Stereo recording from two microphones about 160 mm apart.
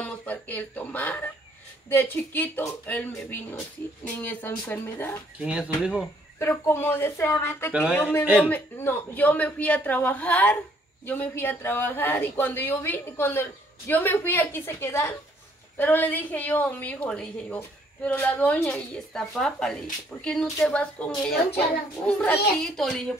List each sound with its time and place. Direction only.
0.0 s a woman's voice: 10° left (ahead or behind)
5.4 s a child's voice: 5° right (ahead or behind)
6.4 s a woman's voice: 15° left (ahead or behind)